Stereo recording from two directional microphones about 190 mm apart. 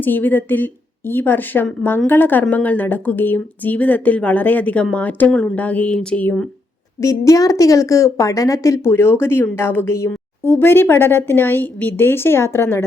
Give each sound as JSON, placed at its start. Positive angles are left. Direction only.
{"t": 0.0, "sound": "a woman's voice", "side_deg": 10}
{"t": 7.0, "sound": "a woman's voice", "side_deg": 15}